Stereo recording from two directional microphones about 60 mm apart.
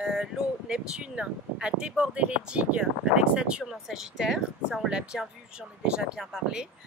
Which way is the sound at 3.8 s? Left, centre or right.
Centre.